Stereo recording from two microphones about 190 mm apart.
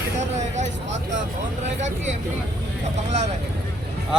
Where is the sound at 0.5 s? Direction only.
35° right (ahead or behind).